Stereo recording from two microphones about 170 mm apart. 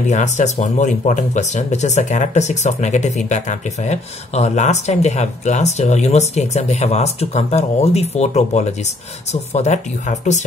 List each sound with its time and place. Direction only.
0.1 s speech: 45° left (ahead or behind)